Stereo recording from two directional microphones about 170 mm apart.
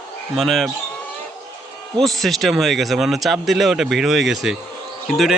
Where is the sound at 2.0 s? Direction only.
Centre (ahead or behind).